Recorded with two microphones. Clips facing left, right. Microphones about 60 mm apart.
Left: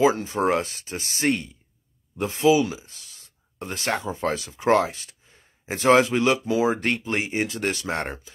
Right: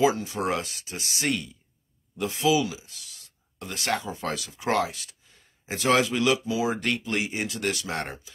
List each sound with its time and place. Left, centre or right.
0.0 s speech: left